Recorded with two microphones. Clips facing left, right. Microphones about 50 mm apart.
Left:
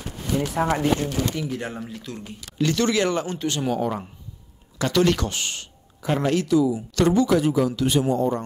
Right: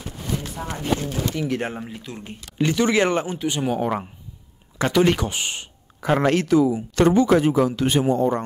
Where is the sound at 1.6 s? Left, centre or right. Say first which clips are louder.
Right 3 dB; right.